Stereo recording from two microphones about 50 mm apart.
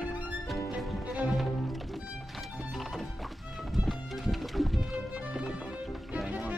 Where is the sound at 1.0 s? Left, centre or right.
Right.